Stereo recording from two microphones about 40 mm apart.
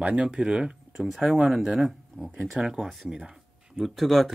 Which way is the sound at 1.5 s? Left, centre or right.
Centre.